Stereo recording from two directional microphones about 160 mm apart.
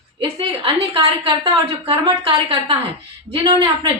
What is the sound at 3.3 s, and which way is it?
Speech, 35° right (ahead or behind).